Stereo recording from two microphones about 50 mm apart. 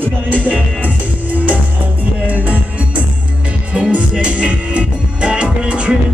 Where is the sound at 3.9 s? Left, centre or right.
Right.